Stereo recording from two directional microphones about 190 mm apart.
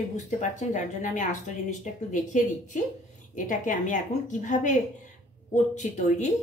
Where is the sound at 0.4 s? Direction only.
40° left (ahead or behind).